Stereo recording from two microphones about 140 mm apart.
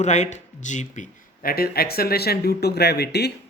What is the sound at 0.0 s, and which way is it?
Speech, 55° left (ahead or behind).